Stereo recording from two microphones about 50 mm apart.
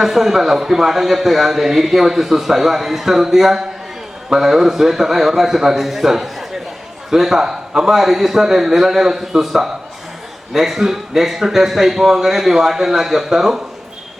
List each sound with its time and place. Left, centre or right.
0.0 s a man's voice: centre